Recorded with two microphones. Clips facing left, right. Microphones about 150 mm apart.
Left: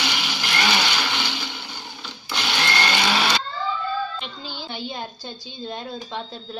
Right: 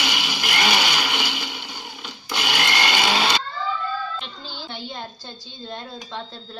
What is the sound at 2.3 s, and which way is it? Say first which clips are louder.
Blender: even; 15° right (ahead or behind).